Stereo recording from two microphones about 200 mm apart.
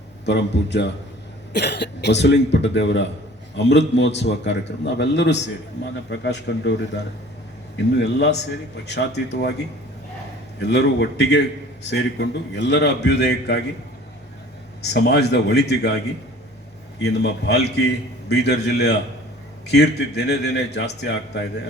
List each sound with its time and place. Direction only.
0.3 s a man's voice: 60° left (ahead or behind)
10.6 s a man's voice: 60° left (ahead or behind)
14.9 s a man's voice: 55° left (ahead or behind)
17.0 s a man's voice: 55° left (ahead or behind)